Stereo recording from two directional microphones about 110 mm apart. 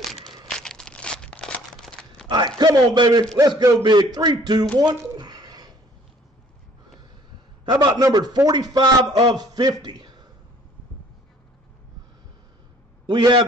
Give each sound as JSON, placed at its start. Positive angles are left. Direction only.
{"t": 0.5, "sound": "crumpling", "side_deg": 5}
{"t": 2.2, "sound": "a man's voice", "side_deg": -40}
{"t": 4.7, "sound": "a sound", "side_deg": -40}
{"t": 7.7, "sound": "a man's voice", "side_deg": -35}
{"t": 9.8, "sound": "a sound", "side_deg": -40}
{"t": 13.1, "sound": "a man's voice", "side_deg": -40}